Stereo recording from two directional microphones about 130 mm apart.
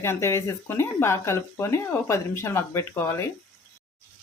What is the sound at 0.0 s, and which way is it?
Speech, 20° left (ahead or behind).